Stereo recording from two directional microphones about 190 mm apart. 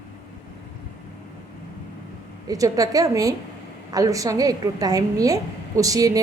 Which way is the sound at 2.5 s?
20° right (ahead or behind).